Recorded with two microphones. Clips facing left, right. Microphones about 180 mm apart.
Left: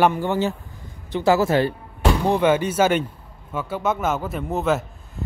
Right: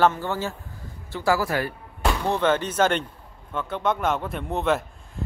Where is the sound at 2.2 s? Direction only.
10° left (ahead or behind).